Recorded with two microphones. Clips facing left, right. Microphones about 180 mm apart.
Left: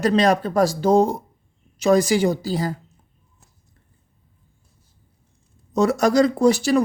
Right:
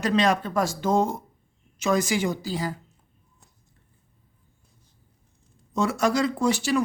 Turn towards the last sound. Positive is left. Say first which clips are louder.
# left 6 dB
turn(degrees=40)  # may be behind; listen again after turning